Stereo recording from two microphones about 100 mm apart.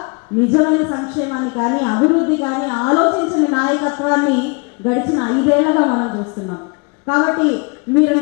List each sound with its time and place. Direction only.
0.5 s speech: 25° left (ahead or behind)